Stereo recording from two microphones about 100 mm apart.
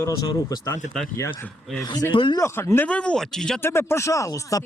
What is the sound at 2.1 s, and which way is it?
Speech, 55° left (ahead or behind).